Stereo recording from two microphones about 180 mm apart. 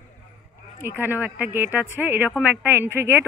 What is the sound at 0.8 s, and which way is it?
Speech, 10° right (ahead or behind).